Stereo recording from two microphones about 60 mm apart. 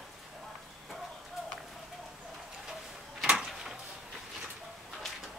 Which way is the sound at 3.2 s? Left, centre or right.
Centre.